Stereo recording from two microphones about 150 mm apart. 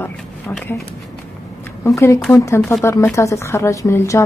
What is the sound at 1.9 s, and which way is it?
Speech, 20° left (ahead or behind).